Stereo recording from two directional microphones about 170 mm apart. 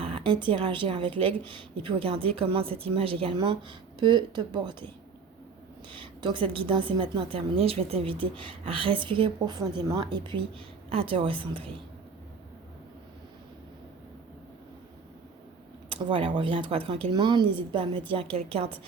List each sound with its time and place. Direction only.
0.0 s a sound: 30° right (ahead or behind)
0.4 s a woman's voice: 30° right (ahead or behind)
5.9 s a woman's voice: 30° right (ahead or behind)
15.9 s speech: 30° right (ahead or behind)